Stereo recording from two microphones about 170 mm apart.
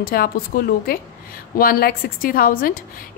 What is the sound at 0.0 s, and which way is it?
A woman's voice, 60° left (ahead or behind).